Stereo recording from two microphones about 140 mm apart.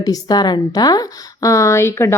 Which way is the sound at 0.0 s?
30° left (ahead or behind).